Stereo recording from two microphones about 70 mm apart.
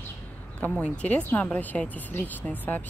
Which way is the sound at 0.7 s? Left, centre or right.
Centre.